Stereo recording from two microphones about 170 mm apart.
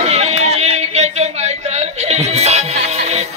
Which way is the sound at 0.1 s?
40° right (ahead or behind).